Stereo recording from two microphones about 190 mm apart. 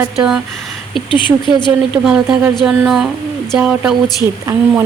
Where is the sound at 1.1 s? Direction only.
25° left (ahead or behind).